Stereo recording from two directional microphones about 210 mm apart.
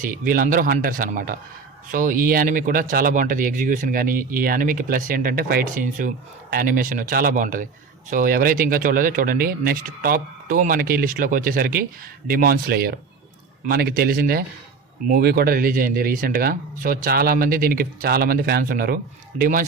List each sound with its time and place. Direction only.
0.0 s speech: 40° right (ahead or behind)